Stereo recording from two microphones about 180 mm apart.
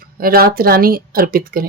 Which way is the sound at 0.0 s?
55° right (ahead or behind).